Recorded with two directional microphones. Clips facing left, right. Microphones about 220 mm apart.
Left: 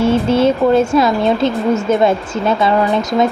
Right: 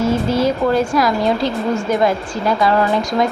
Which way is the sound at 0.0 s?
25° left (ahead or behind).